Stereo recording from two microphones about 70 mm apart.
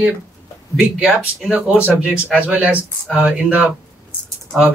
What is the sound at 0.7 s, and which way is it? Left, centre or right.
Speech, centre.